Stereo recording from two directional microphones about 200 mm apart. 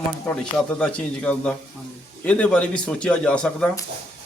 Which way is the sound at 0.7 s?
5° left (ahead or behind).